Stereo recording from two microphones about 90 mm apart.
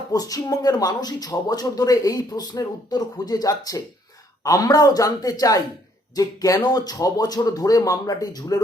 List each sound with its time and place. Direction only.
0.1 s speech: 40° left (ahead or behind)